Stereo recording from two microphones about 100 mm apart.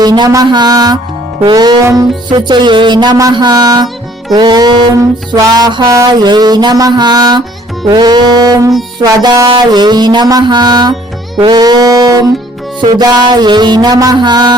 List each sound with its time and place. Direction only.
0.0 s mantra: 45° right (ahead or behind)
0.5 s music: 45° right (ahead or behind)
1.8 s music: 35° right (ahead or behind)
2.4 s music: 50° right (ahead or behind)